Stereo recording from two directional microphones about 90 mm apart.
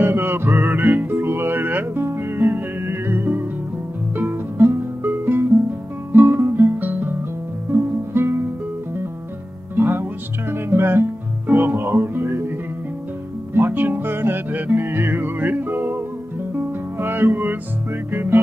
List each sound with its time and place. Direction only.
0.0 s music: 25° right (ahead or behind)
9.8 s music: 25° right (ahead or behind)